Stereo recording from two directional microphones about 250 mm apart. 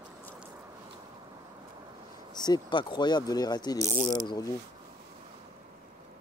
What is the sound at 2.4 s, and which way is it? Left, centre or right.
Speech, centre.